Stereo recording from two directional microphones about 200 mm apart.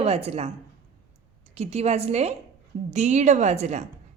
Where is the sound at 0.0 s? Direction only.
30° right (ahead or behind).